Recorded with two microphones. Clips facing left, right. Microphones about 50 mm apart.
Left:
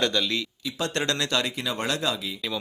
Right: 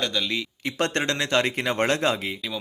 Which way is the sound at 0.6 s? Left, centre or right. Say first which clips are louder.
Right 4 dB; right.